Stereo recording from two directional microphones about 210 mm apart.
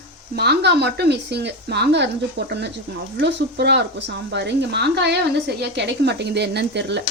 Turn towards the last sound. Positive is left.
turn(degrees=-55)  # may be behind; listen again after turning